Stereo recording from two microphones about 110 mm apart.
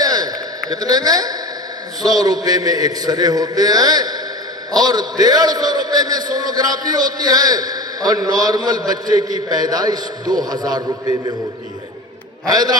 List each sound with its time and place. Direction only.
0.0 s a sound: 35° right (ahead or behind)
2.0 s a man's voice: 35° right (ahead or behind)
12.5 s a man's voice: 40° right (ahead or behind)